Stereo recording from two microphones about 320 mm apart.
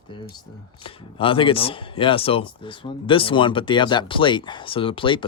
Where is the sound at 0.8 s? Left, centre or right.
Centre.